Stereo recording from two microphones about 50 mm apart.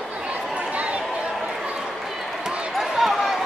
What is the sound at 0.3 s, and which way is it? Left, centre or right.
Chatter, right.